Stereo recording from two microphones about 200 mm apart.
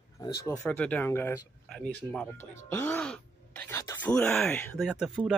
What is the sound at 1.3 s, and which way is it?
Speech, centre (ahead or behind).